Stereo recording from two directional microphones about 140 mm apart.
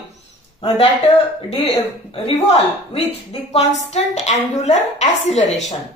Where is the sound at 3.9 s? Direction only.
55° left (ahead or behind).